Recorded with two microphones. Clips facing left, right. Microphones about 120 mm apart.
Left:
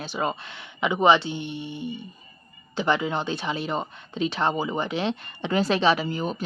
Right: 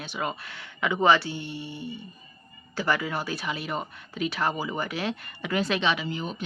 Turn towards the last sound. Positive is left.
turn(degrees=40)  # may be behind; listen again after turning